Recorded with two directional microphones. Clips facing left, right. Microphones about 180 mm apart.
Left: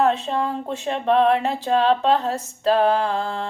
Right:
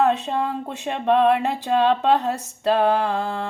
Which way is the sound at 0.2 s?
15° right (ahead or behind).